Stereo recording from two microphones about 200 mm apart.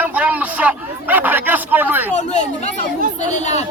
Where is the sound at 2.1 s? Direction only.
35° left (ahead or behind).